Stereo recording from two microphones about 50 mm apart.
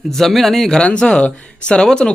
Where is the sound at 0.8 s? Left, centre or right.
Centre.